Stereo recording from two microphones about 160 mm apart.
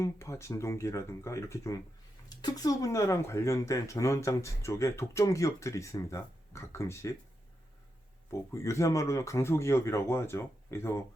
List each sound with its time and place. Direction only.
0.0 s speech: 20° left (ahead or behind)
8.3 s speech: 20° left (ahead or behind)